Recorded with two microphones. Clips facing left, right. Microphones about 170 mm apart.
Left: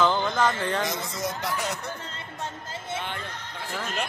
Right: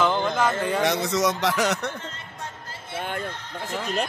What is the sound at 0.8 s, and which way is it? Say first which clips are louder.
A man's voice: right 8 dB; 75° right (ahead or behind).